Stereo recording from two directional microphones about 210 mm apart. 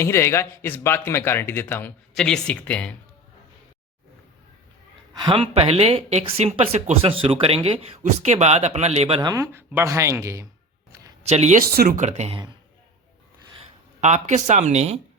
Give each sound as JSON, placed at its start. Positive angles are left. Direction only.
{"t": 0.0, "sound": "speech", "side_deg": 10}
{"t": 5.1, "sound": "speech", "side_deg": -20}
{"t": 9.3, "sound": "speech", "side_deg": -15}
{"t": 11.2, "sound": "speech", "side_deg": -30}
{"t": 14.0, "sound": "speech", "side_deg": -35}